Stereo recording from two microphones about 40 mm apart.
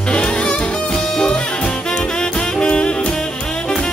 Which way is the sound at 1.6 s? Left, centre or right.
Left.